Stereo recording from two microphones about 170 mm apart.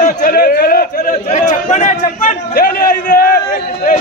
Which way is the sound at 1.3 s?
45° left (ahead or behind).